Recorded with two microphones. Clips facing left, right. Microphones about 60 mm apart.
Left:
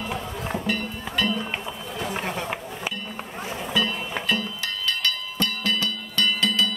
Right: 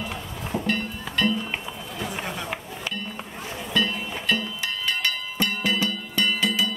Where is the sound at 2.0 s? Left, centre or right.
Left.